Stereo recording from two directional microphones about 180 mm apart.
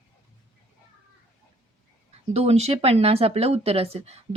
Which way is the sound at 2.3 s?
35° right (ahead or behind).